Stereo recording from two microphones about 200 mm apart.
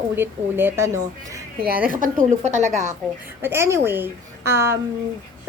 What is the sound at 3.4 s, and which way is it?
A woman's voice, 10° right (ahead or behind).